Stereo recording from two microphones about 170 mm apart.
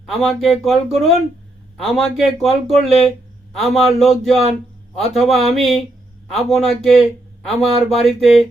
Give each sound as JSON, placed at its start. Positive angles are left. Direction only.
{"t": 0.0, "sound": "speech", "side_deg": 0}